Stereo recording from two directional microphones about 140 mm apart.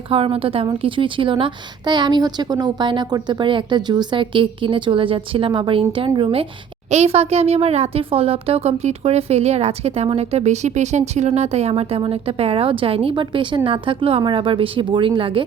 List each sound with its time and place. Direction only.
0.1 s a woman's voice: 40° right (ahead or behind)
6.9 s a woman's voice: 50° right (ahead or behind)